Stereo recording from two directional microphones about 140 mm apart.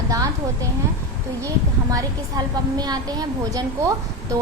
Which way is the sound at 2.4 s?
25° right (ahead or behind).